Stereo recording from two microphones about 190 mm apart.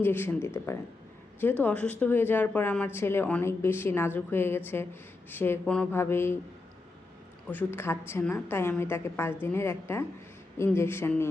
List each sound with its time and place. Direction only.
0.0 s speech: 10° left (ahead or behind)
7.4 s speech: 10° left (ahead or behind)